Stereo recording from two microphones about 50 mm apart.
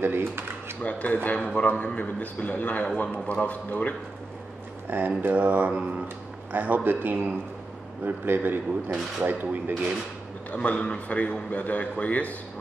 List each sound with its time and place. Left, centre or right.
0.0 s speech: right
0.8 s a man's voice: left
4.8 s speech: right
10.5 s a man's voice: left